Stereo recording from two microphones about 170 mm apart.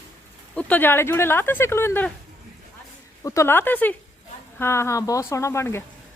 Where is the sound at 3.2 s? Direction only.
20° left (ahead or behind).